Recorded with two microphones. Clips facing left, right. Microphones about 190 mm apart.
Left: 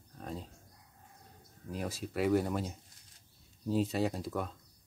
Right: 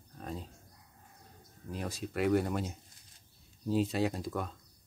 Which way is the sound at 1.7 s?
5° left (ahead or behind).